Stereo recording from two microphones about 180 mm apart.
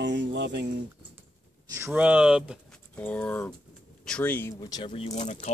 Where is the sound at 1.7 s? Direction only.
10° right (ahead or behind).